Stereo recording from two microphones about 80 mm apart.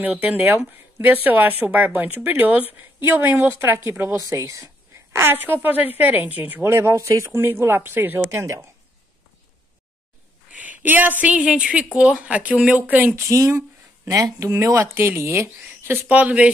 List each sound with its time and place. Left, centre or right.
0.0 s speech: centre
4.2 s speech: right
5.1 s speech: right
8.3 s speech: right
10.7 s speech: right
13.2 s speech: right
16.1 s speech: centre